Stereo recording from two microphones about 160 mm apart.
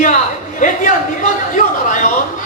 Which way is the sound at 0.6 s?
55° left (ahead or behind).